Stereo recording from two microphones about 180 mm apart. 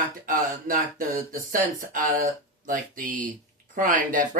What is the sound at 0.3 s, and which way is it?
Speech, 50° right (ahead or behind).